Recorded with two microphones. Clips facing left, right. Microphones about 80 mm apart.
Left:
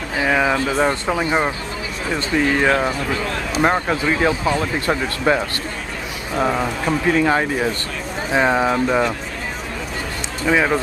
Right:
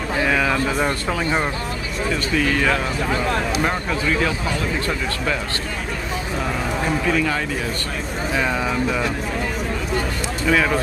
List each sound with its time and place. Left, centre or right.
0.2 s speech: centre
7.1 s speech: left
10.4 s speech: centre